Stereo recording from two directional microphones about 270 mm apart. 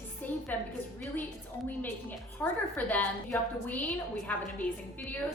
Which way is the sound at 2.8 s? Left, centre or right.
Centre.